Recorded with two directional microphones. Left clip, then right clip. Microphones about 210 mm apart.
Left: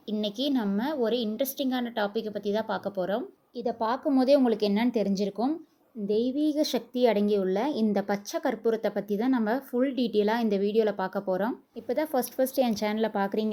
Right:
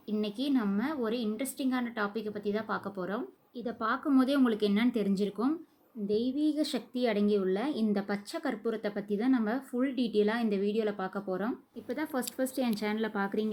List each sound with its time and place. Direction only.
0.1 s a woman's voice: 15° left (ahead or behind)